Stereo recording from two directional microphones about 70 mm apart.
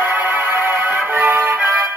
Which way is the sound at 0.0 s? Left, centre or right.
Right.